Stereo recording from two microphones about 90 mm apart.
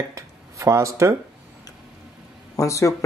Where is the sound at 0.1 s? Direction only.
35° right (ahead or behind).